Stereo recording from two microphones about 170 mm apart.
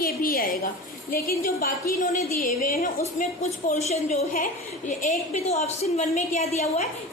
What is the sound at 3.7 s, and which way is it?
A woman's voice, 40° left (ahead or behind).